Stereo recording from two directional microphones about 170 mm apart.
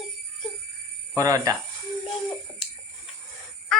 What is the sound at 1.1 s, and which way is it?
Speech, 20° right (ahead or behind).